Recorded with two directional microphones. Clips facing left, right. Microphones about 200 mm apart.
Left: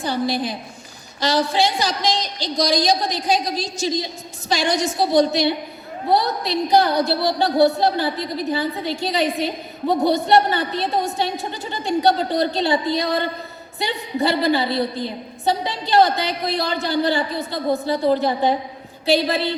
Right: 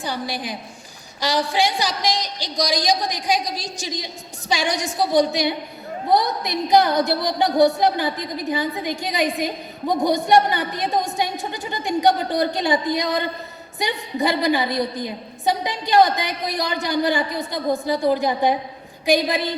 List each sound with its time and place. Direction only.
0.0 s a woman's voice: 15° right (ahead or behind)